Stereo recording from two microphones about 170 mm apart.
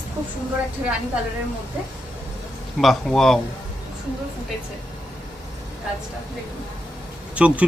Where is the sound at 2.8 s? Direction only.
Centre (ahead or behind).